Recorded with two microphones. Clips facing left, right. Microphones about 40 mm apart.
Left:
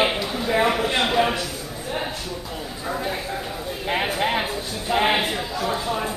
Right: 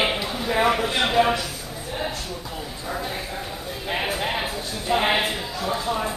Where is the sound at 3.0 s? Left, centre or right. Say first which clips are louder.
Left 3 dB; centre.